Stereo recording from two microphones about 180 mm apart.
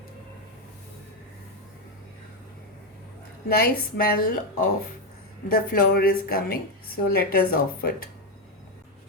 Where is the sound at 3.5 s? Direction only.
55° left (ahead or behind).